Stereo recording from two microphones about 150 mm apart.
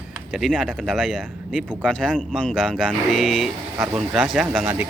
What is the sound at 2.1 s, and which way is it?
Speech, 5° left (ahead or behind).